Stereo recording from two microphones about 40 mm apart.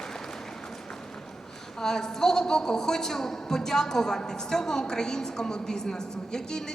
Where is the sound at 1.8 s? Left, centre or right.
Centre.